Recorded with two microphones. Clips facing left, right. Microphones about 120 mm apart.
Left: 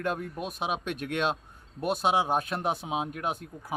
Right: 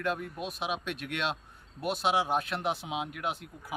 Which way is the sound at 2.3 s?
45° left (ahead or behind).